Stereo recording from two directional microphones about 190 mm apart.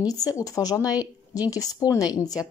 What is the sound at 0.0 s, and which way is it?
Speech, 20° left (ahead or behind).